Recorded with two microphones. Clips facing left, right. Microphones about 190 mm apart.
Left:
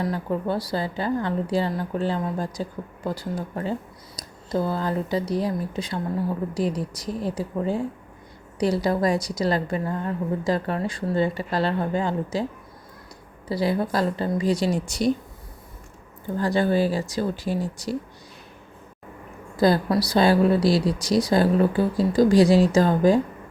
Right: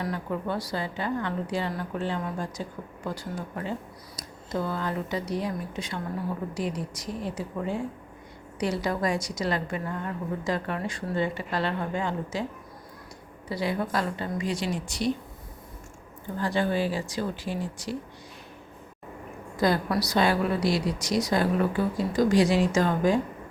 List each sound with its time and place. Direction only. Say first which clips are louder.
0.0 s a woman's voice: left 5 dB; 35° left (ahead or behind)
13.5 s a woman's voice: left 5 dB; 35° left (ahead or behind)
16.4 s a woman's voice: left 5 dB; 40° left (ahead or behind)
19.5 s a woman's voice: left 5 dB; 35° left (ahead or behind)